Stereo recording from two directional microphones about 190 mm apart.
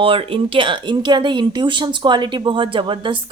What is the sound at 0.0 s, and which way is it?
Speech, 30° right (ahead or behind).